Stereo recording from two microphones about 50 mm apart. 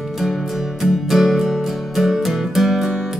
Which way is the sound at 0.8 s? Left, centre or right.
Centre.